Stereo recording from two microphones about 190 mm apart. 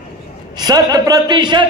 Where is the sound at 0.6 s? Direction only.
20° right (ahead or behind).